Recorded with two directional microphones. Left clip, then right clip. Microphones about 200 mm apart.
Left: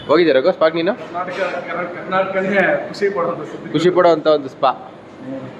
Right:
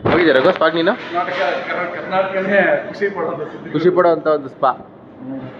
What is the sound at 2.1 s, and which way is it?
Speech, 15° left (ahead or behind).